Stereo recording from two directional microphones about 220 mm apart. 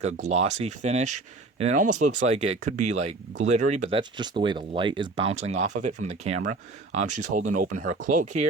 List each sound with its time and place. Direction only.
0.0 s speech: 30° right (ahead or behind)